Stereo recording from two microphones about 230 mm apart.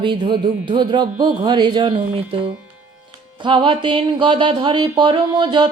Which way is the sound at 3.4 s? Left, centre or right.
Right.